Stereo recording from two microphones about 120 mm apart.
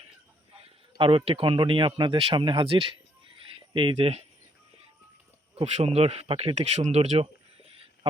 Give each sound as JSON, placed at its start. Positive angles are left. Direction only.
{"t": 0.9, "sound": "speech", "side_deg": -50}
{"t": 5.5, "sound": "speech", "side_deg": -65}